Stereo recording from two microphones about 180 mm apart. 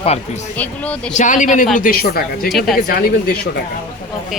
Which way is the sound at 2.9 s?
55° left (ahead or behind).